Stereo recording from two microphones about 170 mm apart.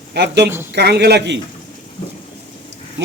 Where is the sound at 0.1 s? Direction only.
75° right (ahead or behind).